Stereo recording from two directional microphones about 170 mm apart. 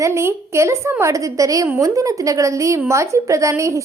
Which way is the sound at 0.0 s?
15° right (ahead or behind).